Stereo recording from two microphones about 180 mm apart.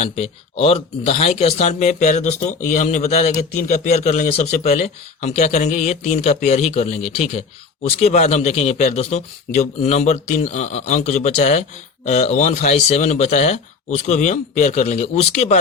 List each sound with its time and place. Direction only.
0.0 s speech: 35° left (ahead or behind)